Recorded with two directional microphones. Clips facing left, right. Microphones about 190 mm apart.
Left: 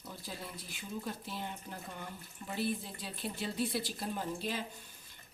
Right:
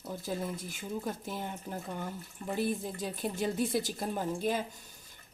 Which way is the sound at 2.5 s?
45° right (ahead or behind).